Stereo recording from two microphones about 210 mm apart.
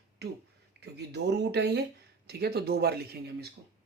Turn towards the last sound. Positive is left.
turn(degrees=-50)  # may be behind; listen again after turning